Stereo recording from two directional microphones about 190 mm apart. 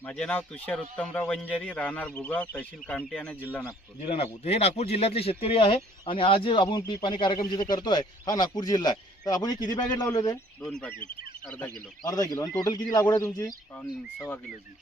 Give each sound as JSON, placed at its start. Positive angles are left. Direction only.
{"t": 0.0, "sound": "a man's voice", "side_deg": 10}
{"t": 4.1, "sound": "speech", "side_deg": 30}
{"t": 10.6, "sound": "a man's voice", "side_deg": 5}